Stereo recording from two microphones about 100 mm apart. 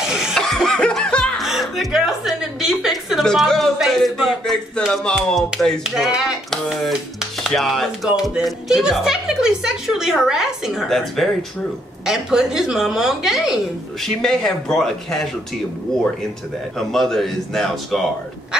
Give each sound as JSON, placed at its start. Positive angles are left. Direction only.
{"t": 0.1, "sound": "music", "side_deg": 0}
{"t": 1.4, "sound": "a woman's voice", "side_deg": 0}
{"t": 16.7, "sound": "a woman's voice", "side_deg": 0}